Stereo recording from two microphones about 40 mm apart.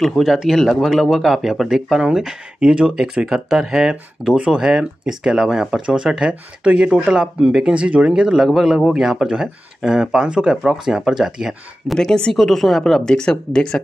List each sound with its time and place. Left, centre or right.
0.0 s speech: centre
2.6 s speech: right
11.9 s speech: centre
13.0 s speech: left